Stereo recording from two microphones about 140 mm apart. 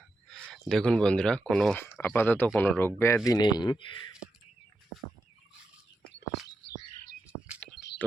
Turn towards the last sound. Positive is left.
turn(degrees=5)  # may be behind; listen again after turning